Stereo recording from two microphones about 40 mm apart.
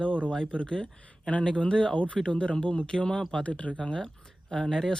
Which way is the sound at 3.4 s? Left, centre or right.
Left.